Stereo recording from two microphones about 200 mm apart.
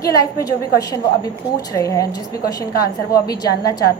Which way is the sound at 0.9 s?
15° left (ahead or behind).